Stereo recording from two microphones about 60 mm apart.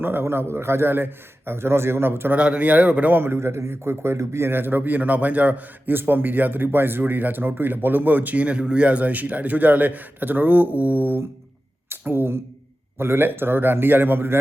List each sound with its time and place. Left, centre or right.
0.0 s a man's voice: right
2.3 s a man's voice: right
3.2 s a man's voice: right
11.9 s a sound: right
13.0 s a man's voice: right